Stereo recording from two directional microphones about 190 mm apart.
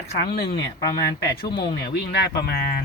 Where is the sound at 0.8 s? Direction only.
20° left (ahead or behind).